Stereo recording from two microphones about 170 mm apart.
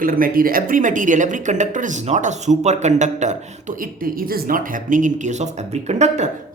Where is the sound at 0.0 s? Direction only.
55° right (ahead or behind).